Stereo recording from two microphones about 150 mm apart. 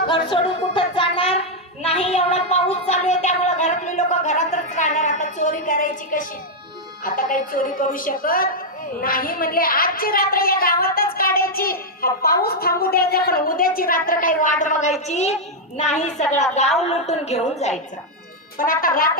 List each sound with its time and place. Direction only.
0.1 s a child's voice: 35° left (ahead or behind); by 14.5 s 65° left (ahead or behind)
14.6 s a child's voice: 55° left (ahead or behind)
18.5 s a woman's voice: 70° left (ahead or behind)